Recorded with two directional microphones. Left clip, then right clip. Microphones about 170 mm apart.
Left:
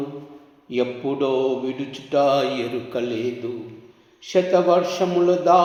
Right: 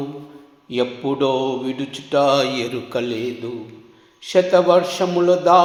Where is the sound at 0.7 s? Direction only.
25° right (ahead or behind).